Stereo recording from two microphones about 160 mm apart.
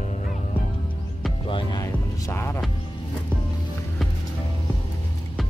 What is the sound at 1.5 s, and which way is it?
Music, 25° left (ahead or behind).